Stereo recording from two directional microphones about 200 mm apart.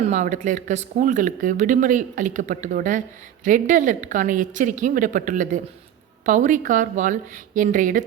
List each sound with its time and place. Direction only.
0.0 s speech: 35° right (ahead or behind)